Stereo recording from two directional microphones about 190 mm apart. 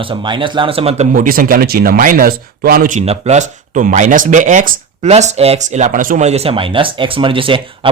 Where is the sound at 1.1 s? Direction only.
45° right (ahead or behind).